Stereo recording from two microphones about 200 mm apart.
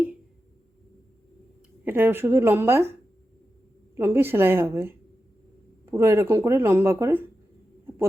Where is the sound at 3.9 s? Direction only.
10° right (ahead or behind).